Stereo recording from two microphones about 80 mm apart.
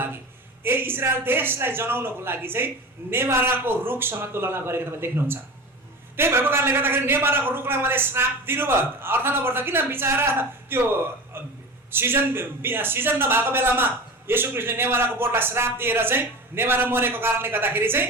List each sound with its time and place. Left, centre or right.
0.6 s a man's voice: right